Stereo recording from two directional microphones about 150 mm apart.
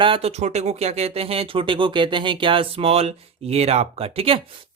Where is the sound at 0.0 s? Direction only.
40° right (ahead or behind).